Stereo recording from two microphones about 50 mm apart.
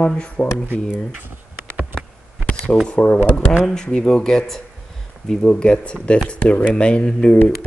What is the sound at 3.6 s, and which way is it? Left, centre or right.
Speech, centre.